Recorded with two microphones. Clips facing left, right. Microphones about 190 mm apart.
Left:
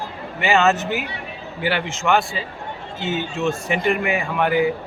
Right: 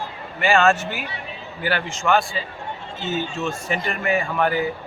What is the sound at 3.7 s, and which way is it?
Speech, 15° left (ahead or behind).